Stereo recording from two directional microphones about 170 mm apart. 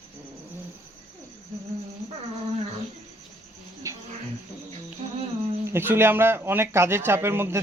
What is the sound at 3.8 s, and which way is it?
Music, 20° right (ahead or behind).